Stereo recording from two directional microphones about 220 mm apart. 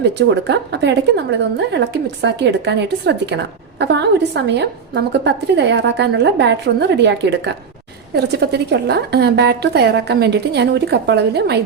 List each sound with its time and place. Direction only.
0.2 s a woman's voice: 50° right (ahead or behind)
2.2 s a woman's voice: 50° right (ahead or behind)